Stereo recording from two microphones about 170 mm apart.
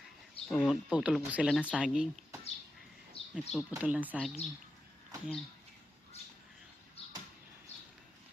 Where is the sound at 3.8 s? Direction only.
10° right (ahead or behind).